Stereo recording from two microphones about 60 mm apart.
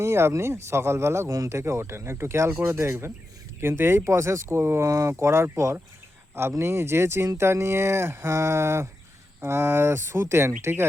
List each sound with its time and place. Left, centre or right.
0.0 s speech: right
2.5 s speech: right
2.7 s speech: right